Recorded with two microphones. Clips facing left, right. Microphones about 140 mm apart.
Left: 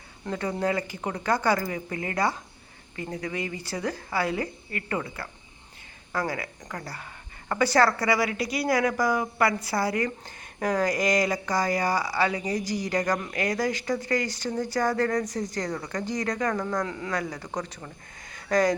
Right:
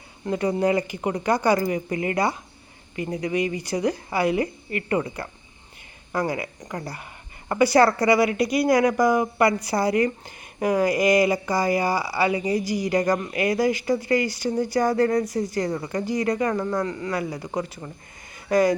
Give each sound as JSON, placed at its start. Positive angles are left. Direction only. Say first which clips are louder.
{"t": 0.3, "sound": "speech", "louder": "right 6 dB", "side_deg": -15}